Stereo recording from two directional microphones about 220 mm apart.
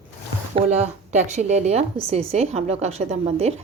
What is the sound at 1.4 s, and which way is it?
A woman's voice, 30° right (ahead or behind).